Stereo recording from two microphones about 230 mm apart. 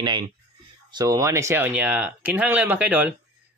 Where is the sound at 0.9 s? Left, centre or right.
Centre.